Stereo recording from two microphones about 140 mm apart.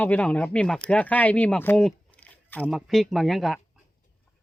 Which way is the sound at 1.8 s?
10° left (ahead or behind).